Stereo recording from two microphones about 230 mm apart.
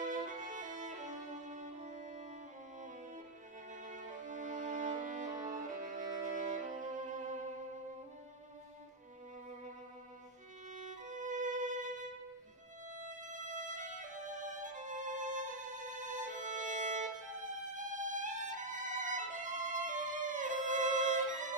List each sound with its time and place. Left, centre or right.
0.0 s music: right
3.7 s music: right
10.7 s violin: right
12.9 s music: right